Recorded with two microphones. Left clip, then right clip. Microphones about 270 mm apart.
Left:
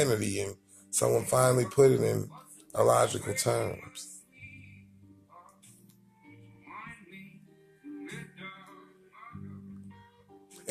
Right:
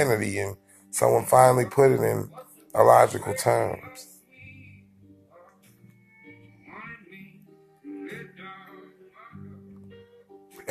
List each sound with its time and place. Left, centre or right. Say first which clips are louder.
0.2 s speech: right 5 dB; centre
0.5 s speech: right 2 dB; centre